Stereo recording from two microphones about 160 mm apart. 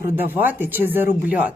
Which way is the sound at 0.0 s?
10° right (ahead or behind).